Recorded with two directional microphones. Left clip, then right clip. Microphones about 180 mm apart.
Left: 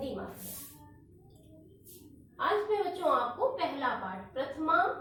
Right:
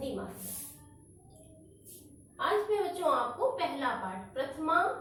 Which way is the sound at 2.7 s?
20° left (ahead or behind).